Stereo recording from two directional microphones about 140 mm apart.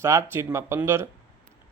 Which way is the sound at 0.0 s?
20° right (ahead or behind).